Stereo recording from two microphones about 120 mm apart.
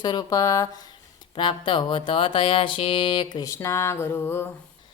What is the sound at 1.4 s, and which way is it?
Speech, 40° left (ahead or behind).